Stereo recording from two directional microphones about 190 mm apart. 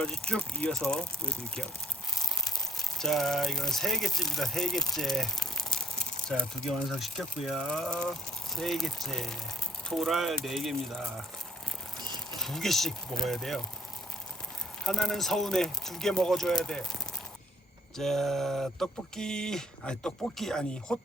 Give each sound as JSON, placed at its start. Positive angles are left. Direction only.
{"t": 0.0, "sound": "speech", "side_deg": 5}
{"t": 11.9, "sound": "a sound", "side_deg": -20}
{"t": 12.4, "sound": "speech", "side_deg": 0}
{"t": 14.8, "sound": "speech", "side_deg": 0}